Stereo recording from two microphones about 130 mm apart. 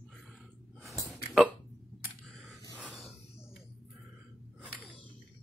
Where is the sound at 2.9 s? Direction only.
Centre (ahead or behind).